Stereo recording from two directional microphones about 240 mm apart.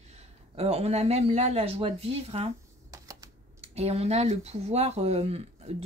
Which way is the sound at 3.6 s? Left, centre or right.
Right.